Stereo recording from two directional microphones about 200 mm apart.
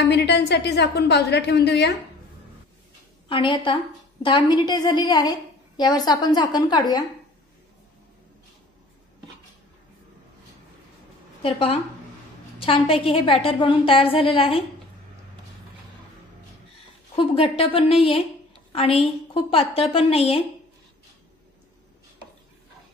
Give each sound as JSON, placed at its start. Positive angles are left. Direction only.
{"t": 0.0, "sound": "a woman's voice", "side_deg": 55}
{"t": 3.3, "sound": "a woman's voice", "side_deg": 25}
{"t": 11.4, "sound": "a woman's voice", "side_deg": 30}
{"t": 17.1, "sound": "a woman's voice", "side_deg": 25}